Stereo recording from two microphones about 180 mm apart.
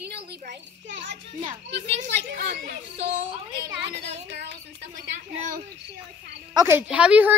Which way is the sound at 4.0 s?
40° right (ahead or behind).